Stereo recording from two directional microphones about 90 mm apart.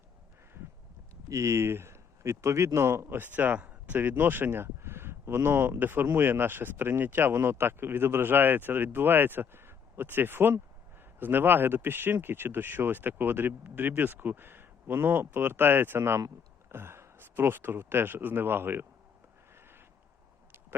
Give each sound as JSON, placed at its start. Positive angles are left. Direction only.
{"t": 1.3, "sound": "speech", "side_deg": -35}